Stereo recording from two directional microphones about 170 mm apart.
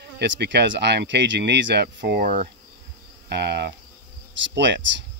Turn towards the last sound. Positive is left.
turn(degrees=-90)